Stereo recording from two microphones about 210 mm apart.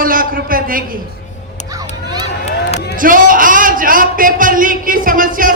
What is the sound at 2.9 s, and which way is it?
A man's voice, 40° right (ahead or behind).